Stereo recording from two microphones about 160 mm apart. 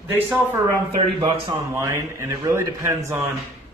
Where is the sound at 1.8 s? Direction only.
15° right (ahead or behind).